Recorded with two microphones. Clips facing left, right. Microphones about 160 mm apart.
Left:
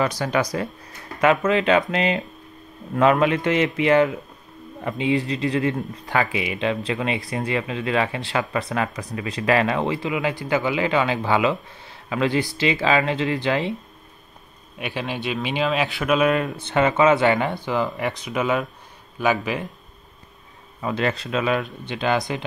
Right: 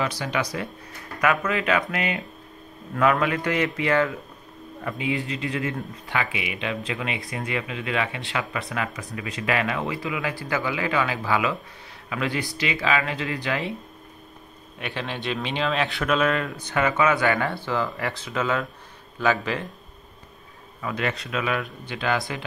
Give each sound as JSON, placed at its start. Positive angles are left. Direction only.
{"t": 0.0, "sound": "speech", "side_deg": 45}
{"t": 1.2, "sound": "speech", "side_deg": 25}
{"t": 14.8, "sound": "speech", "side_deg": 10}
{"t": 20.8, "sound": "speech", "side_deg": 30}